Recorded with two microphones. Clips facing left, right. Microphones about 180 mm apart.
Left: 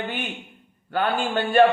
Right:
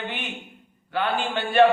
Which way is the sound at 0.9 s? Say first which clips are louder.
Left 2 dB; 45° left (ahead or behind).